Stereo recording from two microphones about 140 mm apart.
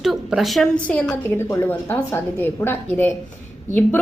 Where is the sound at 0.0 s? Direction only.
Centre (ahead or behind).